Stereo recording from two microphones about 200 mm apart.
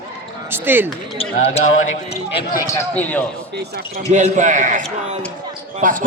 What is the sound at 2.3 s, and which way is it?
Speech, 45° left (ahead or behind).